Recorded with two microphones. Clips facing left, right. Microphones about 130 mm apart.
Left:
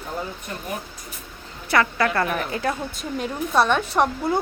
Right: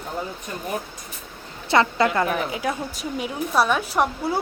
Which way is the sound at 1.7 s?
25° right (ahead or behind).